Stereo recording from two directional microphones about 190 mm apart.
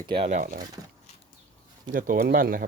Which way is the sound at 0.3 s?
45° right (ahead or behind).